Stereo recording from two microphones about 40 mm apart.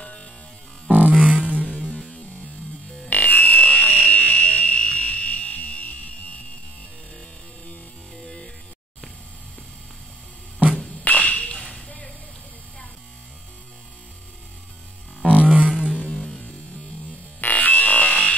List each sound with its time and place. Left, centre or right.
0.0 s music: left
0.8 s music: right
1.5 s music: left
3.1 s fire alarm: left
11.1 s whip: left
15.2 s a sound: right
15.9 s music: left
17.4 s music: left